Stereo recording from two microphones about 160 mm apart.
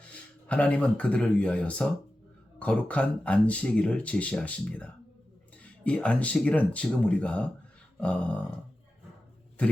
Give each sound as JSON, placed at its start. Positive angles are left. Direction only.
{"t": 0.4, "sound": "speech", "side_deg": 5}
{"t": 9.6, "sound": "a man's voice", "side_deg": 10}